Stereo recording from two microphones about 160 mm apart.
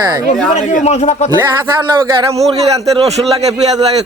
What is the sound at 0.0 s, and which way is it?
Speech, 20° right (ahead or behind).